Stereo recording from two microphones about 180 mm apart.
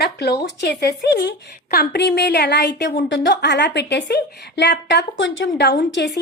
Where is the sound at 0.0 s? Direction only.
65° left (ahead or behind).